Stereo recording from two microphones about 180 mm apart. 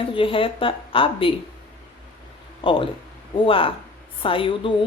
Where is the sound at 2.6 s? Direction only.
30° left (ahead or behind).